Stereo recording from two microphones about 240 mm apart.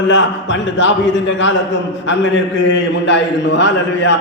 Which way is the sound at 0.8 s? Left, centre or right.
Left.